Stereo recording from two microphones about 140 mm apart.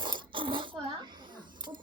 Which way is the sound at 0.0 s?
35° right (ahead or behind).